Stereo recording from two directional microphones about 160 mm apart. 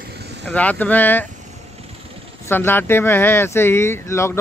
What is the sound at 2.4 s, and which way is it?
Speech, 15° left (ahead or behind).